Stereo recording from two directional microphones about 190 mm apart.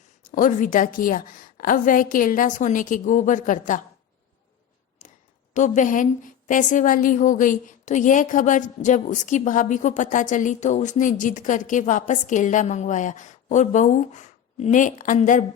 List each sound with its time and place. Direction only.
0.3 s a woman's voice: 45° left (ahead or behind)
5.5 s a woman's voice: 40° left (ahead or behind)